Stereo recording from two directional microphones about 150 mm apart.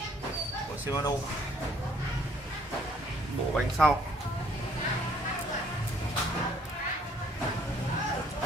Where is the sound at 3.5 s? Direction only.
Centre (ahead or behind).